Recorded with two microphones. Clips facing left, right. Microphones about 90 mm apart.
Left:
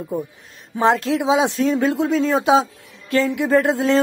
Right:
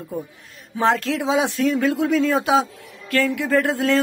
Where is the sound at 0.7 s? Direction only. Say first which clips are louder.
Left 2 dB; 15° left (ahead or behind).